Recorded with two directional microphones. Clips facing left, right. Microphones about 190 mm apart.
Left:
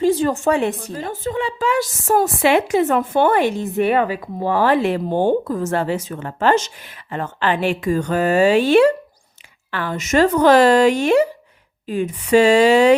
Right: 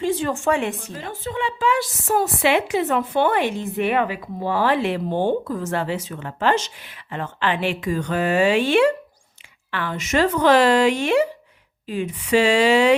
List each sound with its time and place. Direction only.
0.0 s a woman's voice: 40° left (ahead or behind)